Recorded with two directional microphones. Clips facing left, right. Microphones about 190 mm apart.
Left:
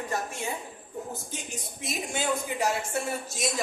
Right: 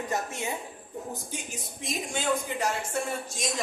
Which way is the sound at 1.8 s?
5° left (ahead or behind).